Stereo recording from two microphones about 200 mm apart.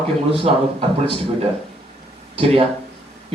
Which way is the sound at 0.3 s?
25° right (ahead or behind).